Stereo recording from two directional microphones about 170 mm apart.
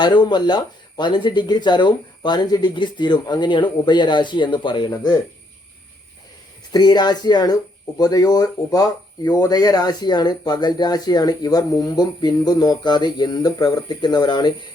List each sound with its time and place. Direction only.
0.0 s speech: 25° left (ahead or behind)
6.7 s speech: 25° left (ahead or behind)